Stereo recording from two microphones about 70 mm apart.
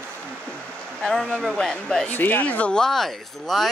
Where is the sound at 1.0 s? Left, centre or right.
Centre.